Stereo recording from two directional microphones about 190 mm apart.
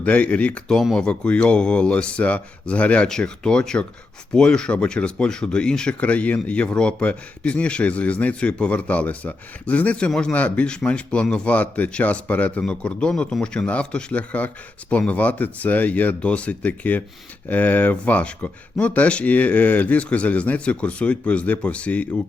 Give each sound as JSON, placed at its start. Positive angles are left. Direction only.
{"t": 0.0, "sound": "speech", "side_deg": 5}